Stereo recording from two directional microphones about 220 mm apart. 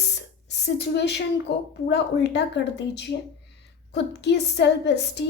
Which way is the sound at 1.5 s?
50° left (ahead or behind).